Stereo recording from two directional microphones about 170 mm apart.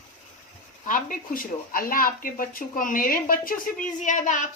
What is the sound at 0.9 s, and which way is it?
Speech, 55° left (ahead or behind).